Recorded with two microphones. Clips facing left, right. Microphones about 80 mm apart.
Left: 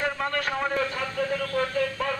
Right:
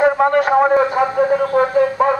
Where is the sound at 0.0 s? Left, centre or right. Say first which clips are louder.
Right 14 dB; right.